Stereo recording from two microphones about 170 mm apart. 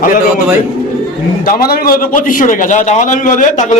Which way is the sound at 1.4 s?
60° left (ahead or behind).